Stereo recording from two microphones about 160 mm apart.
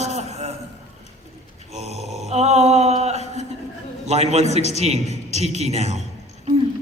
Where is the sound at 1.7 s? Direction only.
40° right (ahead or behind).